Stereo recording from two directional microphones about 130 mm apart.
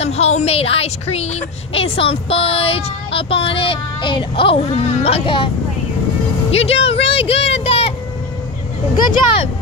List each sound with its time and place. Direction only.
0.0 s speech: 55° left (ahead or behind)
6.5 s speech: 50° left (ahead or behind)